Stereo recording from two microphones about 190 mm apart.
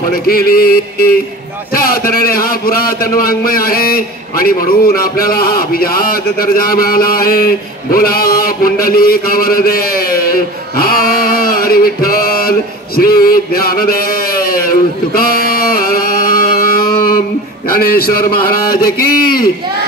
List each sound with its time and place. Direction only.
0.1 s a man's voice: 50° left (ahead or behind)
15.1 s a sound: 50° left (ahead or behind)
18.5 s a man's voice: 50° left (ahead or behind)